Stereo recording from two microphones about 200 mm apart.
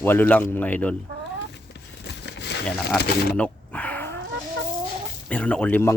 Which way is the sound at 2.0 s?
55° left (ahead or behind).